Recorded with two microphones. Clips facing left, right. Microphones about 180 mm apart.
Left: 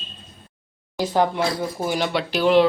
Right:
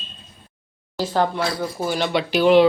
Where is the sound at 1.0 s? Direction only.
15° left (ahead or behind).